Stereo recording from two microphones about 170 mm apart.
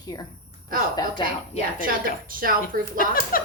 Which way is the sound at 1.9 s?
55° right (ahead or behind).